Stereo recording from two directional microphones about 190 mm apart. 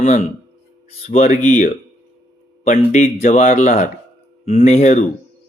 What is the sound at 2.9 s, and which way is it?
Speech, 35° left (ahead or behind).